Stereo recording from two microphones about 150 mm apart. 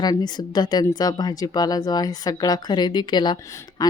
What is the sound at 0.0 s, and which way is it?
Speech, 25° left (ahead or behind).